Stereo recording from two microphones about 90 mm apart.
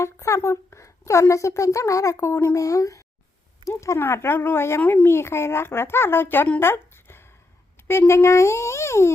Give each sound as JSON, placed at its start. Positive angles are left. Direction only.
{"t": 0.0, "sound": "a woman's voice", "side_deg": 35}
{"t": 4.8, "sound": "speech", "side_deg": 15}
{"t": 5.0, "sound": "a child's voice", "side_deg": 30}